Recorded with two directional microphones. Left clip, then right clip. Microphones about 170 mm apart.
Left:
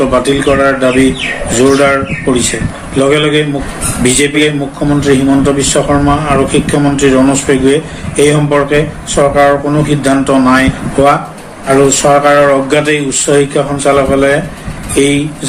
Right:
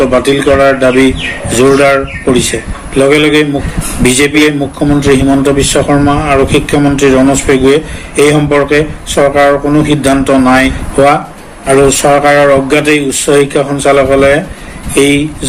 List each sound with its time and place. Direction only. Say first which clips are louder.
0.1 s a man's voice: right 2 dB; 50° right (ahead or behind)